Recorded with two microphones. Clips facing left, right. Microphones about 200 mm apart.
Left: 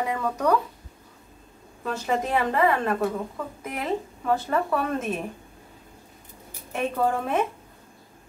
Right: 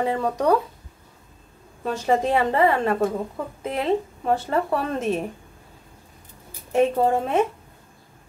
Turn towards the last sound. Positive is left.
turn(degrees=-30)  # may be behind; listen again after turning